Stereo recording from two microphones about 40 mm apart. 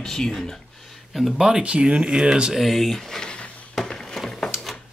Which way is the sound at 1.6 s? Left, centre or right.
Right.